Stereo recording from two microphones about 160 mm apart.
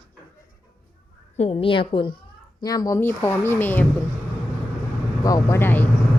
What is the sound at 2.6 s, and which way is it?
Speech, 20° left (ahead or behind).